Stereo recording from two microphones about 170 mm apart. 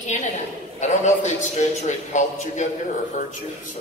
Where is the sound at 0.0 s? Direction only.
45° left (ahead or behind).